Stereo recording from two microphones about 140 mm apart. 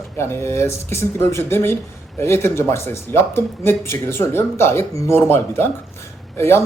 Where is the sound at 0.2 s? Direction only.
20° left (ahead or behind).